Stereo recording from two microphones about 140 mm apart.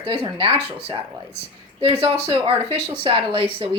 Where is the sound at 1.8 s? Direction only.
30° right (ahead or behind).